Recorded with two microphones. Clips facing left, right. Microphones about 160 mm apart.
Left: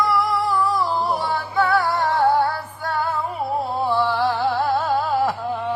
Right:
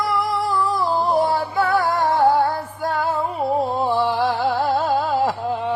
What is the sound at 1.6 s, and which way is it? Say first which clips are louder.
Music: even; 50° right (ahead or behind).